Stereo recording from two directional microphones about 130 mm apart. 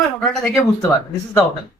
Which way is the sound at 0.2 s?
5° left (ahead or behind).